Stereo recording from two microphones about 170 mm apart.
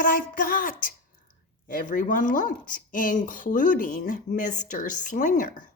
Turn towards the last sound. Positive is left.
turn(degrees=55)  # may be behind; listen again after turning